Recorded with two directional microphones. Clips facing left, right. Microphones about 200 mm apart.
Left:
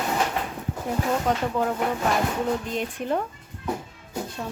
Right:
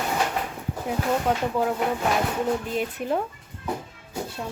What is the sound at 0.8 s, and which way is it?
Speech, 5° right (ahead or behind).